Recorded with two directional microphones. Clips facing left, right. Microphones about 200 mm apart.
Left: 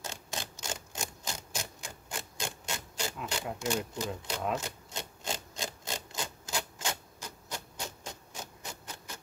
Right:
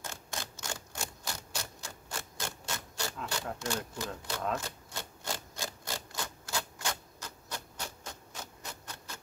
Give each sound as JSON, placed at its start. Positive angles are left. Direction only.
{"t": 0.0, "sound": "typewriter", "side_deg": 15}